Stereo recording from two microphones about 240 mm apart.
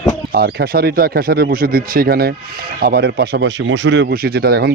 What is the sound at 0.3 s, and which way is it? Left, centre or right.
Speech, right.